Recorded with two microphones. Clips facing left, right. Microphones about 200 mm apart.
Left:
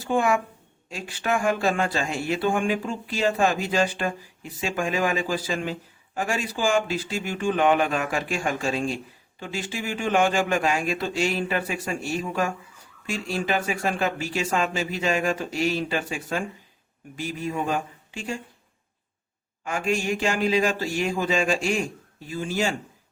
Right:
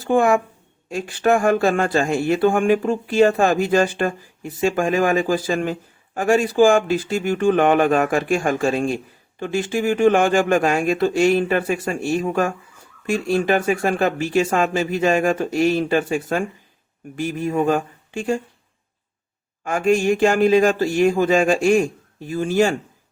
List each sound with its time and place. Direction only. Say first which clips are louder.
0.0 s a woman's voice: right 6 dB; 50° right (ahead or behind)
19.6 s speech: right 8 dB; 50° right (ahead or behind)